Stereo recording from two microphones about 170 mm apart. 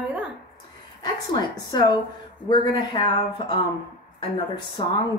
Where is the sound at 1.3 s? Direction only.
25° left (ahead or behind).